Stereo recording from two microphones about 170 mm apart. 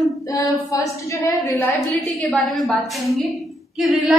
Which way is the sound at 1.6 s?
Centre (ahead or behind).